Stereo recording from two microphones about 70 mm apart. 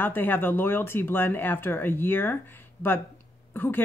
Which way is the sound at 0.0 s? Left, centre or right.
Left.